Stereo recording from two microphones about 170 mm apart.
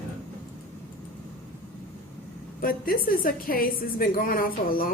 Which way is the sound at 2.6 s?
60° left (ahead or behind).